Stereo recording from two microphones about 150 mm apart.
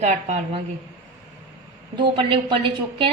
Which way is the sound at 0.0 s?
50° right (ahead or behind).